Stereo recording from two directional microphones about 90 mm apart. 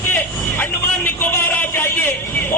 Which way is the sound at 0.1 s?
25° left (ahead or behind).